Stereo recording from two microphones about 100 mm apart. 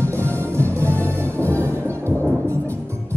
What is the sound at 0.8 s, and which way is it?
Music, 15° left (ahead or behind).